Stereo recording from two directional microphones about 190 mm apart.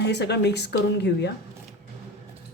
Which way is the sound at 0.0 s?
60° left (ahead or behind).